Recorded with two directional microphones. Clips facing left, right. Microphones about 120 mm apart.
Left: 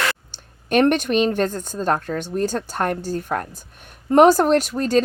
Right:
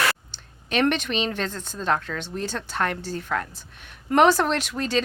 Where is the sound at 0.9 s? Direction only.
50° left (ahead or behind).